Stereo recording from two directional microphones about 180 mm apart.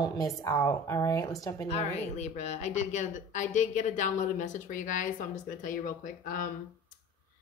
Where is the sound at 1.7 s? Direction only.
40° left (ahead or behind).